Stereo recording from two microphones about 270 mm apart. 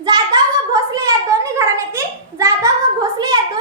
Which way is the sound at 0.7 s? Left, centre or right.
Centre.